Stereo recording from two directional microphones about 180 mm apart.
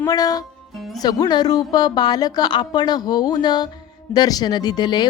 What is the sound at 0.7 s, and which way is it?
Music, centre (ahead or behind).